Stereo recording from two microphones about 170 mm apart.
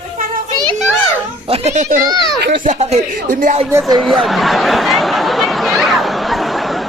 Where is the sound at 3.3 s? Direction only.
55° right (ahead or behind).